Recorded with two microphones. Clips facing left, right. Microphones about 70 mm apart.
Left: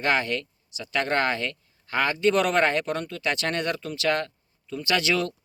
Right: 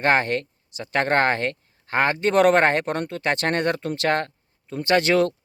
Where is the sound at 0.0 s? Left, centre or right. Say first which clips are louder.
Right 4 dB; right.